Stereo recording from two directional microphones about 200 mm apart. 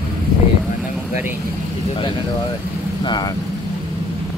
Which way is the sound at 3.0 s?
20° left (ahead or behind).